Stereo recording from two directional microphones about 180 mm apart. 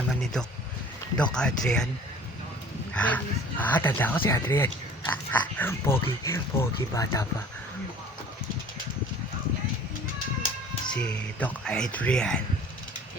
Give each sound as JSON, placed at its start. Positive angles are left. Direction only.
{"t": 1.1, "sound": "speech", "side_deg": 5}
{"t": 2.9, "sound": "speech", "side_deg": 5}
{"t": 10.8, "sound": "speech", "side_deg": 5}